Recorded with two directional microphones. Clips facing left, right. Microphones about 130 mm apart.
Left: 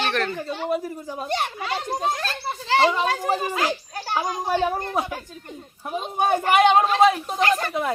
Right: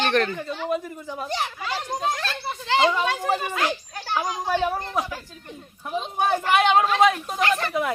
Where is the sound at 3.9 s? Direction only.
35° left (ahead or behind).